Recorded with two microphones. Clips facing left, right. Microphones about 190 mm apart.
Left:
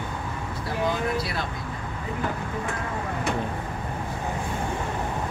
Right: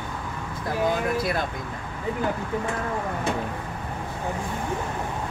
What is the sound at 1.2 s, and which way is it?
Speech, 50° right (ahead or behind).